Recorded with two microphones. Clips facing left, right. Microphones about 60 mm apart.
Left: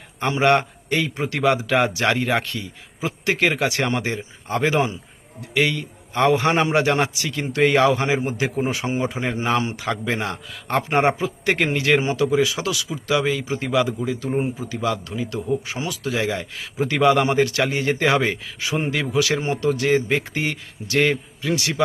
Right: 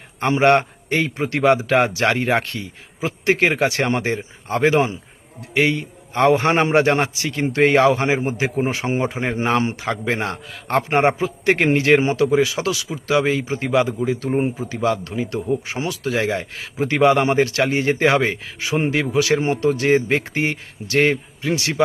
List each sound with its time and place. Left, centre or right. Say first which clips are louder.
0.2 s a man's voice: right 3 dB; right